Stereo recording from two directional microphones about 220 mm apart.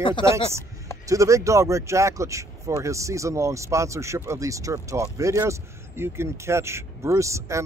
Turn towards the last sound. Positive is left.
turn(degrees=-15)  # may be behind; listen again after turning